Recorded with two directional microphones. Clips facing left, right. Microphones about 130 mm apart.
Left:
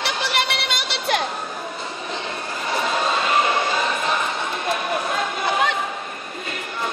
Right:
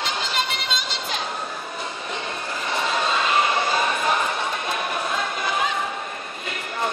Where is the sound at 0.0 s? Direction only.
70° left (ahead or behind).